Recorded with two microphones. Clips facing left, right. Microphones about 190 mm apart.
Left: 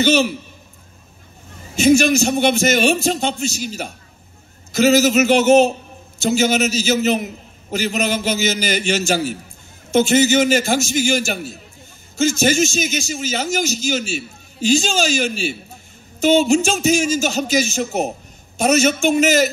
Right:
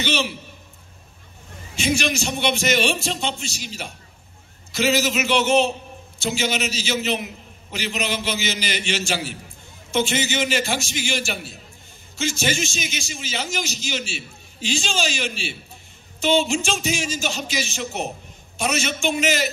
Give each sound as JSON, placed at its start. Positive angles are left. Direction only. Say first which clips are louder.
{"t": 0.0, "sound": "a man's voice", "louder": "left 9 dB", "side_deg": 45}
{"t": 1.8, "sound": "a man's voice", "louder": "left 10 dB", "side_deg": 45}